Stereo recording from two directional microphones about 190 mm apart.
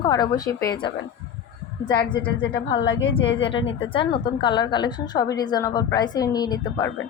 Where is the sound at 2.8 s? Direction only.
85° left.